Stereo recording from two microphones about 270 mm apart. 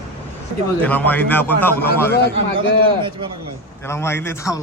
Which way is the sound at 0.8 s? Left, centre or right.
Centre.